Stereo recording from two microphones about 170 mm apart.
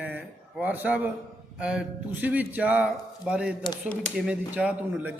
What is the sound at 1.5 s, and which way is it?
Speech, 5° right (ahead or behind).